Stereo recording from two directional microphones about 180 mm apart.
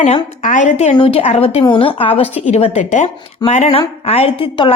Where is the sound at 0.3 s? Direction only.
45° left (ahead or behind).